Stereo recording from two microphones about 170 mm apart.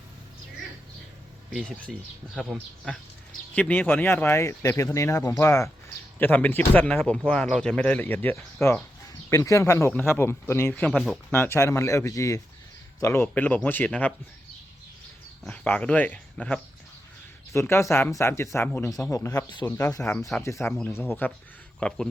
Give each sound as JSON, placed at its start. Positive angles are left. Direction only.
{"t": 1.7, "sound": "a man's voice", "side_deg": 0}
{"t": 15.4, "sound": "a man's voice", "side_deg": 10}